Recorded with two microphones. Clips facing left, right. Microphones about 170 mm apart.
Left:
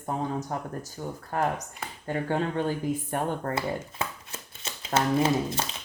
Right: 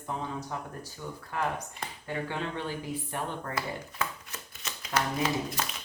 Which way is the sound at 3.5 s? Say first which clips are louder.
Left 4 dB; 25° left (ahead or behind).